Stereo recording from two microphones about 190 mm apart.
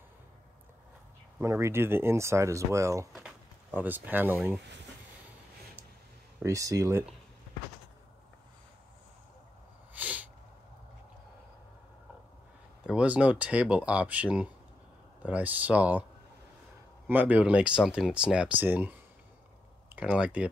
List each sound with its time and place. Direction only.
1.4 s speech: 15° right (ahead or behind)
3.1 s speech: 5° right (ahead or behind)
6.4 s speech: 15° right (ahead or behind)
9.9 s sneeze: 5° right (ahead or behind)
12.8 s speech: 5° right (ahead or behind)
17.1 s speech: 10° right (ahead or behind)
20.0 s speech: 5° right (ahead or behind)